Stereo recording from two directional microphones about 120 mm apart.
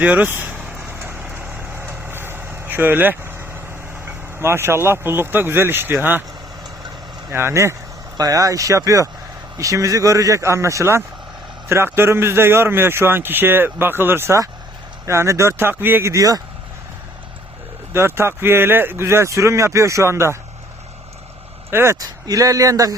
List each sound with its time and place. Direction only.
0.0 s speech: 15° right (ahead or behind)
1.9 s vehicle: 20° right (ahead or behind)
4.0 s a man's voice: 20° right (ahead or behind)
7.3 s a man's voice: 20° right (ahead or behind)
17.9 s a man's voice: 20° right (ahead or behind)
21.7 s a man's voice: 20° right (ahead or behind)